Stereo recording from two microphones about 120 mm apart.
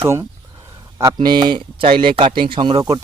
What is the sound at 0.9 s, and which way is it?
Speech, 35° right (ahead or behind).